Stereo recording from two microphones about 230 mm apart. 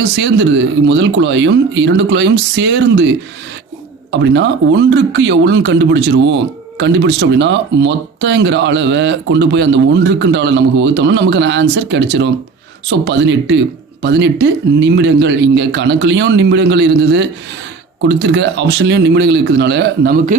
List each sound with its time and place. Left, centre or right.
0.0 s speech: right